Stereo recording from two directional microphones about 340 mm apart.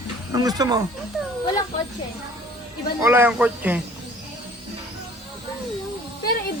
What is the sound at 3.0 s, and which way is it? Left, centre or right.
Speech, centre.